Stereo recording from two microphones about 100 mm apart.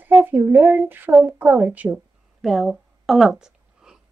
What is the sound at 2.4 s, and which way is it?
Speech, centre (ahead or behind).